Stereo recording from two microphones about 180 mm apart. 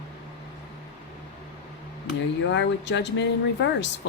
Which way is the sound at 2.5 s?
80° left.